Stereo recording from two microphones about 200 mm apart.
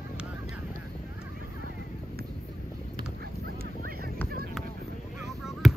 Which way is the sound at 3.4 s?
50° right (ahead or behind).